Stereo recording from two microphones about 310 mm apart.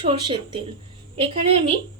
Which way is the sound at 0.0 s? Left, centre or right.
Centre.